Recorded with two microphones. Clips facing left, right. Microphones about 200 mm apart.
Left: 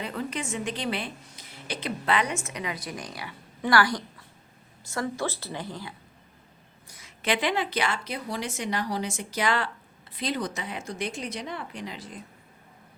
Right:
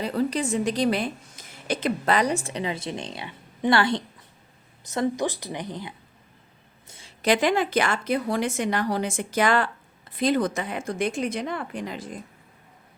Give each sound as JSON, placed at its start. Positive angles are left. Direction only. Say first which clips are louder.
{"t": 0.0, "sound": "a woman's voice", "louder": "right 7 dB", "side_deg": -35}
{"t": 6.8, "sound": "a sound", "louder": "right 3 dB", "side_deg": -25}
{"t": 7.2, "sound": "a woman's voice", "louder": "right 5 dB", "side_deg": -45}